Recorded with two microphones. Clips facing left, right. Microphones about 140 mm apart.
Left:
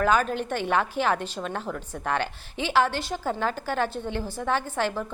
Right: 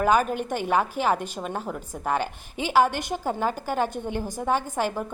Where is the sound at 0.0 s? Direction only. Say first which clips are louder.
Right 1 dB; 10° right (ahead or behind).